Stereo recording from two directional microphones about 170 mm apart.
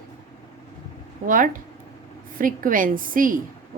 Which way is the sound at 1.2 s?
55° right (ahead or behind).